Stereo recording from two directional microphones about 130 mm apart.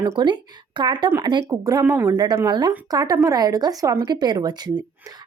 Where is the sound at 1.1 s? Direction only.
25° right (ahead or behind).